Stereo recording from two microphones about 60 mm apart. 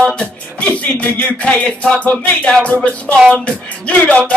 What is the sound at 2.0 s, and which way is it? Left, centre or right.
Speech, left.